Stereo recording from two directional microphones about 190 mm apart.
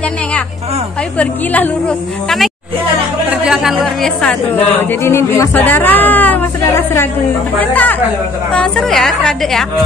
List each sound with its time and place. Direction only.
1.1 s a woman's voice: 10° left (ahead or behind)
4.7 s a woman's voice: 15° left (ahead or behind)